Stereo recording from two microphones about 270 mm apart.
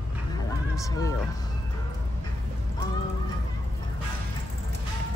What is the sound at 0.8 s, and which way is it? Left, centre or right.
Speech, centre.